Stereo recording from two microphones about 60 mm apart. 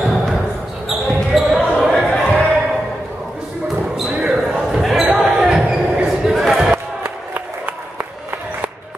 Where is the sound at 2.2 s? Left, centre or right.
Left.